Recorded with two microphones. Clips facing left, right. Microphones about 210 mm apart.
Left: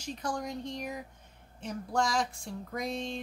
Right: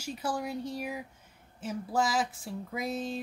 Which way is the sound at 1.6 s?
5° right (ahead or behind).